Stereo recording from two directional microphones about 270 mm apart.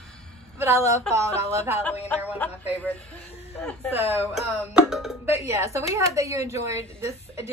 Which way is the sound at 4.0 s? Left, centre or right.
Centre.